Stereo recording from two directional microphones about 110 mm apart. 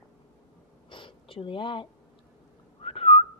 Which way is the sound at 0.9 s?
50° left (ahead or behind).